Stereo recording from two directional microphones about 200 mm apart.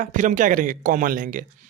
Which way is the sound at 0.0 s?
40° right (ahead or behind).